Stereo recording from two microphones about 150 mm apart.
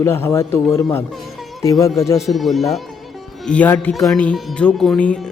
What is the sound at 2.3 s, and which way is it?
Speech, centre (ahead or behind).